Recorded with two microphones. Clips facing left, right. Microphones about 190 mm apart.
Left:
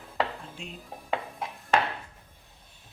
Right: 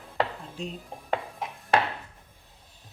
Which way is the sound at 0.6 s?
40° right (ahead or behind).